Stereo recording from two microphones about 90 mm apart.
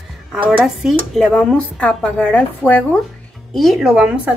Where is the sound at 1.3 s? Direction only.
10° left (ahead or behind).